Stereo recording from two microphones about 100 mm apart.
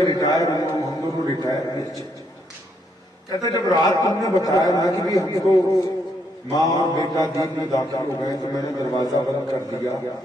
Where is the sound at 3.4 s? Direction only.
40° left (ahead or behind).